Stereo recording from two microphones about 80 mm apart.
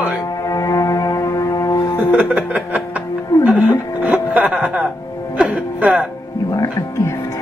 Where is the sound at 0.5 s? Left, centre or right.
Left.